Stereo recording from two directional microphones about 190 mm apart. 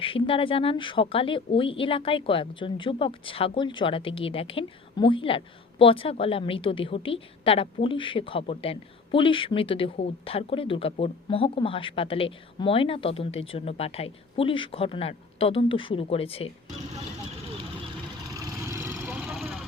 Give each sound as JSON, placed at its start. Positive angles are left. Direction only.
{"t": 0.0, "sound": "a woman's voice", "side_deg": 30}
{"t": 18.6, "sound": "vehicle", "side_deg": -15}